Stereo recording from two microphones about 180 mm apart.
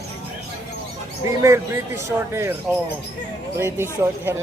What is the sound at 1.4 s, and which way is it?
A man's voice, 15° right (ahead or behind).